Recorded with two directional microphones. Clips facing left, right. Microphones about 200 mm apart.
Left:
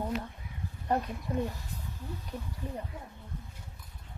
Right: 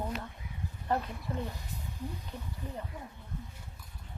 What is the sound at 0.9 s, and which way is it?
Speech, 15° left (ahead or behind).